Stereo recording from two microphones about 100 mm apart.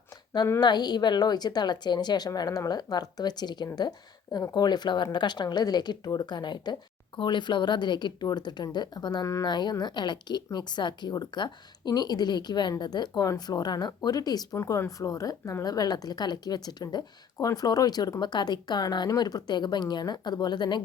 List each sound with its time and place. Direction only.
0.6 s speech: 45° left (ahead or behind)